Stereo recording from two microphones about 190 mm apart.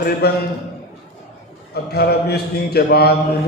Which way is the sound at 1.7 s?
55° left (ahead or behind).